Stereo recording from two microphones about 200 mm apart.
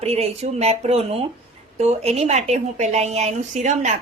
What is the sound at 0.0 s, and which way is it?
A woman's voice, 30° right (ahead or behind).